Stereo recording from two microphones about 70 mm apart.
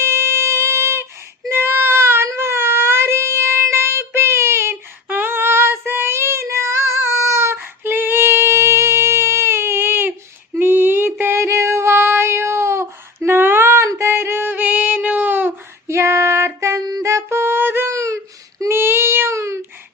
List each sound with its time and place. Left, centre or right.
0.0 s music: right
1.5 s baby cry: right
2.2 s child singing: right
10.6 s female singing: right
14.0 s music: right
16.0 s music: right
17.9 s a sound: right
18.7 s child singing: right